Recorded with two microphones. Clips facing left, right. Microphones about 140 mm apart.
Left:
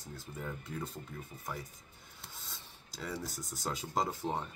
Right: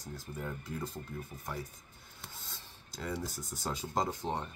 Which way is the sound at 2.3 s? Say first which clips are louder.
Left 1 dB; centre (ahead or behind).